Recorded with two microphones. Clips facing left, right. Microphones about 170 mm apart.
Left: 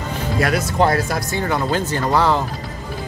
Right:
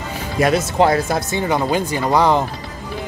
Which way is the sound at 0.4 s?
25° right (ahead or behind).